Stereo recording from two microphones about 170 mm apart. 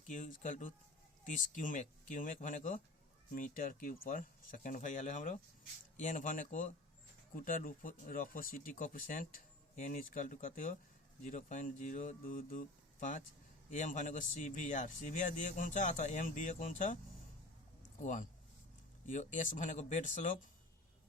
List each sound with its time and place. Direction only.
0.1 s speech: 45° left (ahead or behind)
18.0 s speech: 50° left (ahead or behind)